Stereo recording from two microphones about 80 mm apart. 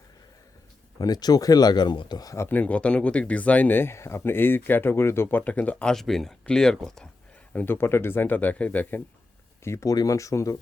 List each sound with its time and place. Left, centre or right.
0.9 s speech: left
2.5 s speech: centre
5.4 s speech: centre
5.9 s speech: centre
7.5 s speech: left
9.6 s speech: left
9.9 s speech: left